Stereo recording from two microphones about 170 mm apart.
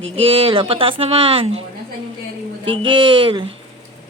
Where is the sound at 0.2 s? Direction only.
35° right (ahead or behind).